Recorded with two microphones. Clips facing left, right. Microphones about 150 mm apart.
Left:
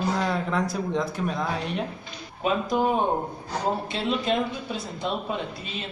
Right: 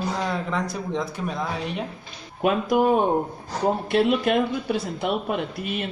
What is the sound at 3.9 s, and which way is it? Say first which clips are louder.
Speech: right 6 dB; 60° right (ahead or behind).